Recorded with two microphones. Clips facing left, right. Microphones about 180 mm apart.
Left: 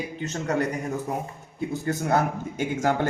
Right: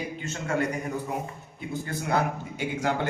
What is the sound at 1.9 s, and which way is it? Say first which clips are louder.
A man's voice: left 3 dB; 45° left (ahead or behind).